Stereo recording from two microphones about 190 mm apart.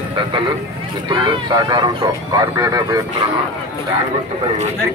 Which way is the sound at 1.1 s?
20° right (ahead or behind).